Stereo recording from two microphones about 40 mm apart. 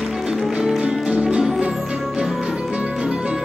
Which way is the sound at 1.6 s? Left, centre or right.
Centre.